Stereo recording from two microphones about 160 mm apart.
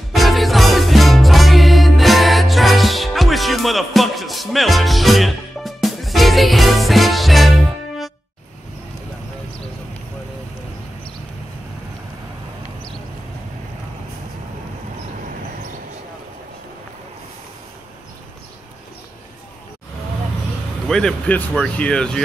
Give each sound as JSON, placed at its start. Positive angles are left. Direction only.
{"t": 0.1, "sound": "music", "side_deg": 0}
{"t": 20.9, "sound": "speech", "side_deg": 5}